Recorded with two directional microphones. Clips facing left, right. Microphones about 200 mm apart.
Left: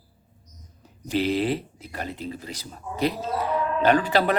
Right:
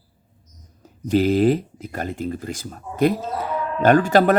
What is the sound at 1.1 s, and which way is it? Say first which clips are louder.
Speech: right 7 dB; 45° right (ahead or behind).